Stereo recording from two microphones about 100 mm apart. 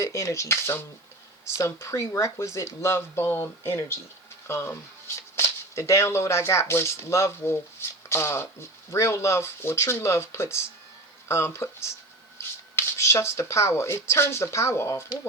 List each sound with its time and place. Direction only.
0.0 s speech: 30° left (ahead or behind)